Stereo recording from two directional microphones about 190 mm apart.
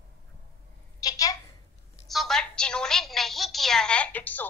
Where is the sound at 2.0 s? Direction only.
Centre (ahead or behind).